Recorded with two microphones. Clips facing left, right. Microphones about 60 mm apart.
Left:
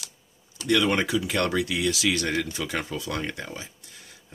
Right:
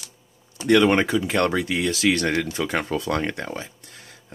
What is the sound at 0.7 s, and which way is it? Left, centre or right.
Speech, right.